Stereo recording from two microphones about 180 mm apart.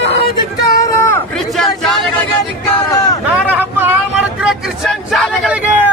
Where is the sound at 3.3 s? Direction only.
10° right (ahead or behind).